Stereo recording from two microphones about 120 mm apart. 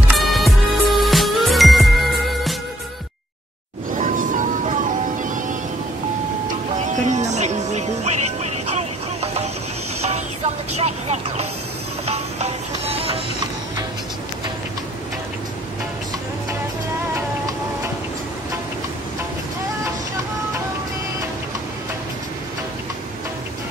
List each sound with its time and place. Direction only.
0.1 s music: centre (ahead or behind)
3.9 s music: 90° right
6.8 s music: 85° right; by 9.5 s 60° right (ahead or behind)
10.8 s vehicle: 65° right (ahead or behind)
12.1 s music: 60° right (ahead or behind)